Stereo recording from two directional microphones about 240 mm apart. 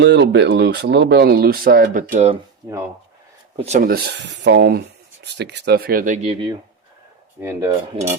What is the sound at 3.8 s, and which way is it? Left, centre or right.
Speech, right.